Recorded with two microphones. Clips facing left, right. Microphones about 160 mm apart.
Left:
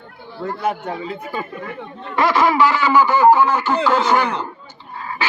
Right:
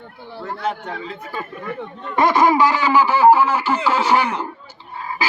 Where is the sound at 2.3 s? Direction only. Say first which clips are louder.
Even; 15° right (ahead or behind).